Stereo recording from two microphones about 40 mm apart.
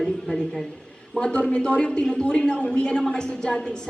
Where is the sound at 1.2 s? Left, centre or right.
Left.